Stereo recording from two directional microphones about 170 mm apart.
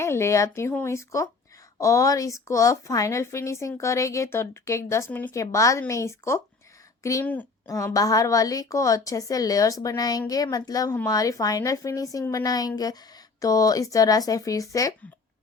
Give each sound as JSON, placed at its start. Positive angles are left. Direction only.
{"t": 0.0, "sound": "a woman's voice", "side_deg": 15}